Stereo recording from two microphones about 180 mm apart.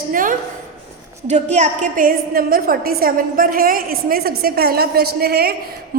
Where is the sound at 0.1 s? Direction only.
50° right (ahead or behind).